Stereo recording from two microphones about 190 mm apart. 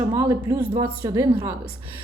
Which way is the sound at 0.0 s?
15° right (ahead or behind).